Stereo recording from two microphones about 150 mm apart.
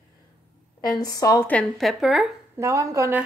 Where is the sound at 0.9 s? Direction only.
25° left (ahead or behind).